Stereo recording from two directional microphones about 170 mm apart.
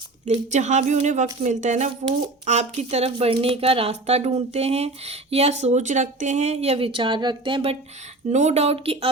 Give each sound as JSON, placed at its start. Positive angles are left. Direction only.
{"t": 0.3, "sound": "speech", "side_deg": -45}
{"t": 8.3, "sound": "speech", "side_deg": -45}